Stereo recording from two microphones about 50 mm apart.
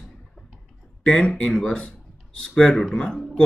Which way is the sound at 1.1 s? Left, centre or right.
Centre.